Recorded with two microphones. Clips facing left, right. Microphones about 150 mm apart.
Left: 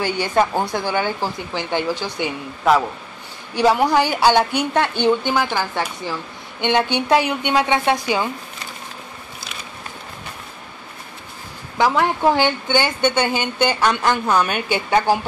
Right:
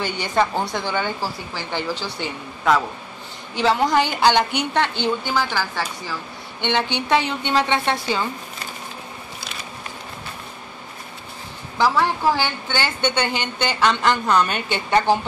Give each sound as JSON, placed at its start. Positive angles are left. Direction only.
{"t": 0.0, "sound": "a woman's voice", "side_deg": 10}
{"t": 11.8, "sound": "a woman's voice", "side_deg": 20}